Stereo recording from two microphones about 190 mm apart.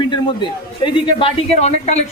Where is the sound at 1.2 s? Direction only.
35° left (ahead or behind).